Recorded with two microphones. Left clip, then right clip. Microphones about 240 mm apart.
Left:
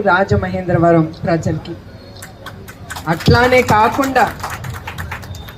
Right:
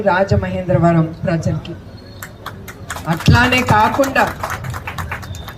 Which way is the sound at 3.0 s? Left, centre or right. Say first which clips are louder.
Left 2 dB; centre.